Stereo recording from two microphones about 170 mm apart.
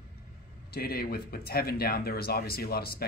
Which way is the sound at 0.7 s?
65° left (ahead or behind).